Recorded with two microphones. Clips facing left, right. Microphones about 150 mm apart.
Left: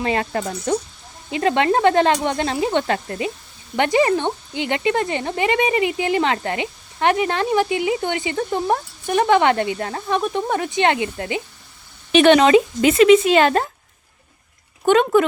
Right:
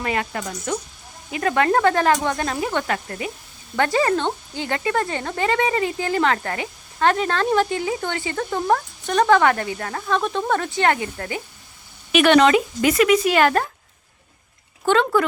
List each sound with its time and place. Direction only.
0.0 s speech: 30° left (ahead or behind)
14.8 s speech: 15° left (ahead or behind)